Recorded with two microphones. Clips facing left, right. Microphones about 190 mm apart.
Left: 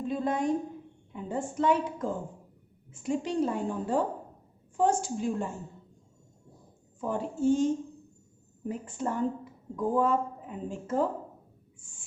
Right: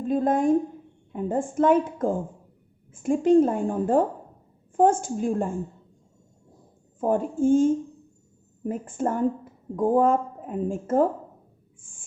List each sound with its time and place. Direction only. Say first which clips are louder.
0.0 s a sound: right 7 dB; 50° right (ahead or behind)
1.1 s a woman's voice: right 7 dB; 50° right (ahead or behind)
7.0 s a woman's voice: right 6 dB; 50° right (ahead or behind)
11.8 s owl: right 1 dB; 50° right (ahead or behind)